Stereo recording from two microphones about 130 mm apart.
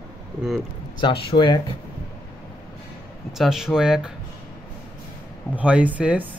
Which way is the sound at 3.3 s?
5° right (ahead or behind).